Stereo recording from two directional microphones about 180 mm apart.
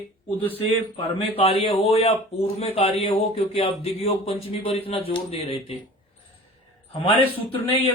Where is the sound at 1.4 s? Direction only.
30° left (ahead or behind).